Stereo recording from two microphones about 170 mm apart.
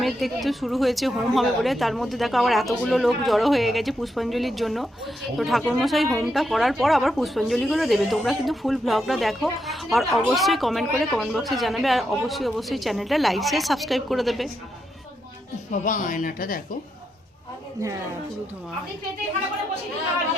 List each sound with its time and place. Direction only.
0.0 s a woman's voice: centre (ahead or behind)
15.7 s speech: 50° left (ahead or behind)